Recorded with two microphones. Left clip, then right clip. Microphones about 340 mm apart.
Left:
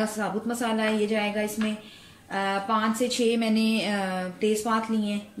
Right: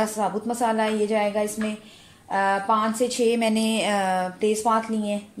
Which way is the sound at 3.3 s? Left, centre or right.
Centre.